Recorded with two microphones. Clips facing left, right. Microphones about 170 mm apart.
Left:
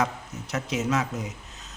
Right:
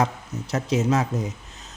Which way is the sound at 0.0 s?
30° right (ahead or behind).